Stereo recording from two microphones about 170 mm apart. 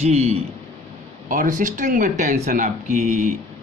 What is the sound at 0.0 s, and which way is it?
Speech, 40° right (ahead or behind).